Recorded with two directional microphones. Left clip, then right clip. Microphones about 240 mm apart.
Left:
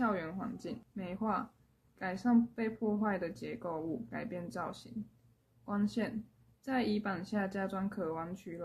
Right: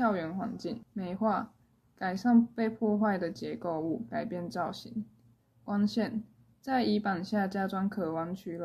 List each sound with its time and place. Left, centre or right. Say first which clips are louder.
0.0 s speech: right 5 dB; centre